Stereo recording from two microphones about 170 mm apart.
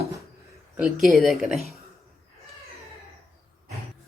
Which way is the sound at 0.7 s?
5° right (ahead or behind).